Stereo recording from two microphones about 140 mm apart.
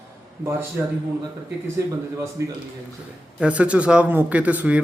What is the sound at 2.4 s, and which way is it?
Speech, 20° right (ahead or behind).